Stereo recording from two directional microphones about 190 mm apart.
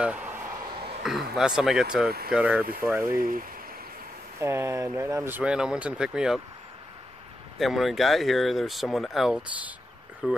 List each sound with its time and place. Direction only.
0.0 s a sound: 5° right (ahead or behind)
1.0 s speech: centre (ahead or behind)
3.2 s speech: 50° right (ahead or behind)
4.4 s speech: 15° right (ahead or behind)
7.5 s speech: centre (ahead or behind)